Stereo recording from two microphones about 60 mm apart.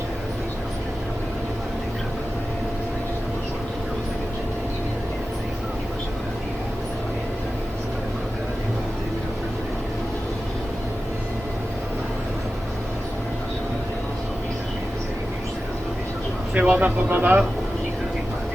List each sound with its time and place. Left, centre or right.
16.6 s vehicle: centre
16.8 s speech: right